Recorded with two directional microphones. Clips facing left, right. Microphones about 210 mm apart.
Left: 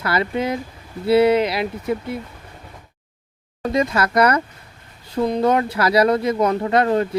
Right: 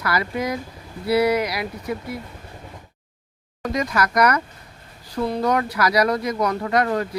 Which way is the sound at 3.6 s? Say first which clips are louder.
Left 3 dB; 25° left (ahead or behind).